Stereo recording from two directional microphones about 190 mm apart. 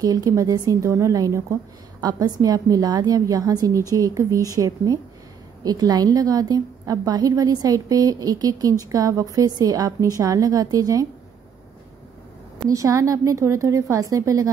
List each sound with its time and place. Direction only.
0.0 s a woman's voice: 20° right (ahead or behind)
12.6 s a woman's voice: 15° right (ahead or behind)